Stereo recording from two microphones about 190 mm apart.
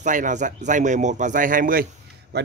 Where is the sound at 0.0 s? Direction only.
40° right (ahead or behind).